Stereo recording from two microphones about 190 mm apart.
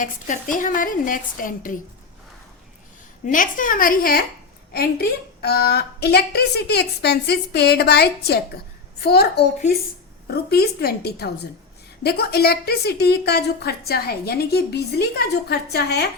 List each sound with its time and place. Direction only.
0.0 s a woman's voice: 45° left (ahead or behind)
3.2 s a woman's voice: 45° left (ahead or behind); by 16.0 s 60° left (ahead or behind)